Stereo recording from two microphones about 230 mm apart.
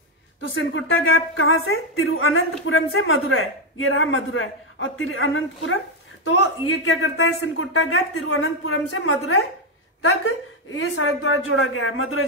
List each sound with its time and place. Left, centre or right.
0.6 s a woman's voice: left